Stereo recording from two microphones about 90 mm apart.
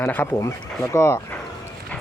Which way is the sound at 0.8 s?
30° left (ahead or behind).